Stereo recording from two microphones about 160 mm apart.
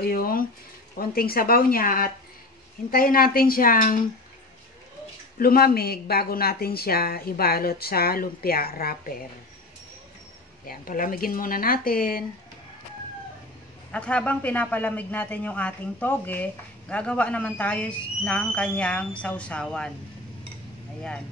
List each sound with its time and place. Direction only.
0.0 s a sound: 65° left (ahead or behind)
0.9 s speech: 65° left (ahead or behind)
5.4 s speech: 70° left (ahead or behind)
10.7 s speech: 65° left (ahead or behind)
13.9 s a man's voice: 10° left (ahead or behind)